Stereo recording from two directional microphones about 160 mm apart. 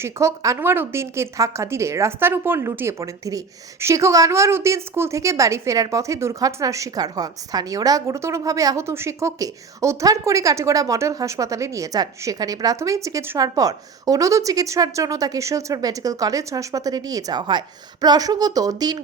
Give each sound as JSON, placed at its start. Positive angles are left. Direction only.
{"t": 0.0, "sound": "a woman's voice", "side_deg": -20}